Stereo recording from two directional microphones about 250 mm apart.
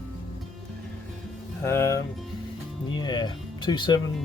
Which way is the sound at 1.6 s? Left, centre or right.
Centre.